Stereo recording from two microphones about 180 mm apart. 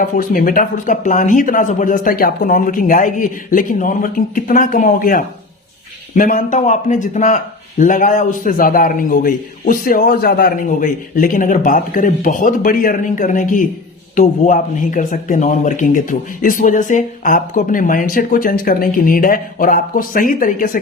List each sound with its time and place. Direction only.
0.0 s a man's voice: 50° left (ahead or behind)